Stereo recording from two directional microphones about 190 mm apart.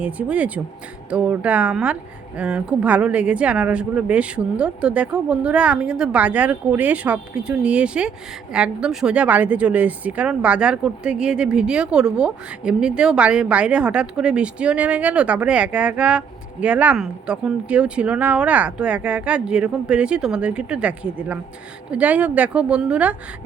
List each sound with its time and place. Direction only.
0.0 s a woman's voice: 5° right (ahead or behind)